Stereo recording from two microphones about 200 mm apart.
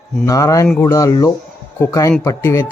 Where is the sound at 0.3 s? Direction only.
15° left (ahead or behind).